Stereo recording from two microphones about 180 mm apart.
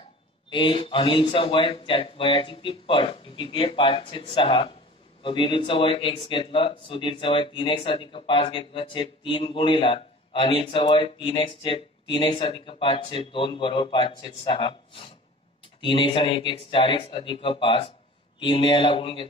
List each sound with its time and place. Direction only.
0.5 s speech: 30° left (ahead or behind)